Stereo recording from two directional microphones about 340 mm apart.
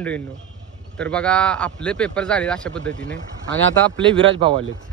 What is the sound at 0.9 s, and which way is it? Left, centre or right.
A man's voice, centre.